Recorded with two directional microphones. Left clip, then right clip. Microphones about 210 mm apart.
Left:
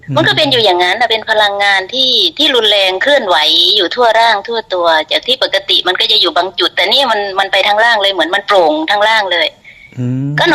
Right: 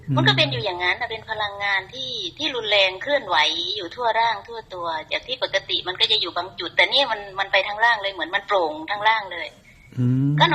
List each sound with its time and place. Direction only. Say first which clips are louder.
0.2 s a woman's voice: left 10 dB; 50° left (ahead or behind)